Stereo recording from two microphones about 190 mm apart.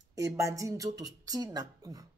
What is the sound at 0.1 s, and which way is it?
Speech, 15° right (ahead or behind).